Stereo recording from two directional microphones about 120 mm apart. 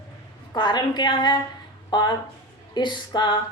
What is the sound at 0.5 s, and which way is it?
A woman's voice, 40° left (ahead or behind).